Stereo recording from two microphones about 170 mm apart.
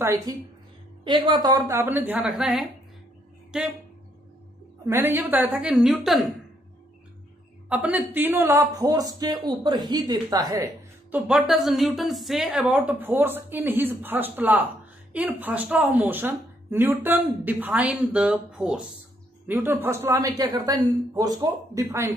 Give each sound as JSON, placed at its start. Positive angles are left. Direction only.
{"t": 0.0, "sound": "speech", "side_deg": -20}
{"t": 4.8, "sound": "speech", "side_deg": -15}
{"t": 7.7, "sound": "speech", "side_deg": -10}
{"t": 11.1, "sound": "speech", "side_deg": -5}